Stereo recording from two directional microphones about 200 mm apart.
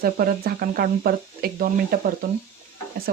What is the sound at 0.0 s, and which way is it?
Speech, 50° right (ahead or behind).